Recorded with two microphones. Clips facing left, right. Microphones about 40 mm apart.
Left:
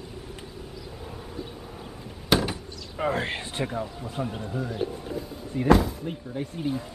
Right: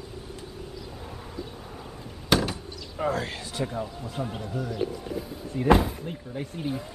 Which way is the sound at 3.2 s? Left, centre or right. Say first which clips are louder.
Left 2 dB; left.